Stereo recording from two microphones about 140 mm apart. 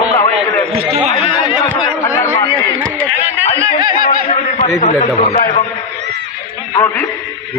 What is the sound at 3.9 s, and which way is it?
Snicker, 70° left (ahead or behind).